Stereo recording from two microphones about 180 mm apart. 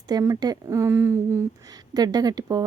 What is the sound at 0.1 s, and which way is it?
Speech, 20° right (ahead or behind).